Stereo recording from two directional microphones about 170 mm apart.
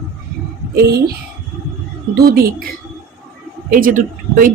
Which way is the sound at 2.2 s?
65° right (ahead or behind).